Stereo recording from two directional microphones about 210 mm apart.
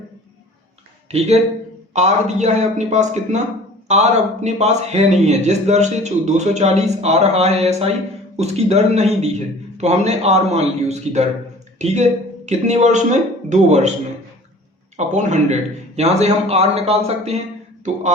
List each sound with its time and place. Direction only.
1.9 s a man's voice: 35° right (ahead or behind)
14.9 s a man's voice: 35° right (ahead or behind)